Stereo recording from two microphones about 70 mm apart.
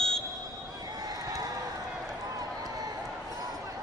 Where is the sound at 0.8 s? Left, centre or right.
Right.